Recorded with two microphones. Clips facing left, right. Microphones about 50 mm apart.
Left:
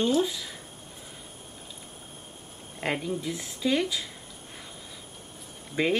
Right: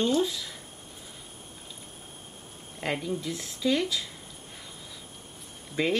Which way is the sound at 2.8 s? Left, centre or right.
Centre.